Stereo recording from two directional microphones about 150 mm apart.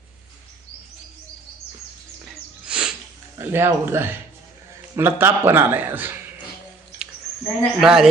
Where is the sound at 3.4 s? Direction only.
15° right (ahead or behind).